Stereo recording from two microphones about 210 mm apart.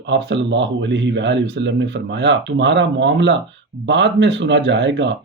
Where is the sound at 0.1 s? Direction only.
60° right (ahead or behind).